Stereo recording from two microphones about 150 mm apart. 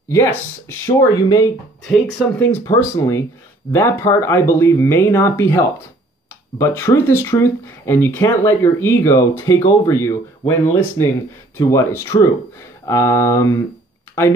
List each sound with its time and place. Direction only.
0.8 s speech: 25° left (ahead or behind)
1.9 s speech: 10° left (ahead or behind)